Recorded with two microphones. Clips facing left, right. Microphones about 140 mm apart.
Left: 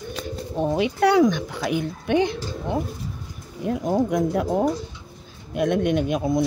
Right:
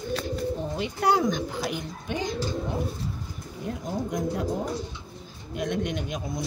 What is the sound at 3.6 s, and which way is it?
Speech, 60° left (ahead or behind).